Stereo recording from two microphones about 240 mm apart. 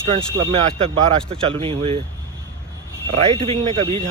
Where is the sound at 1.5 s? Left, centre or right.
Right.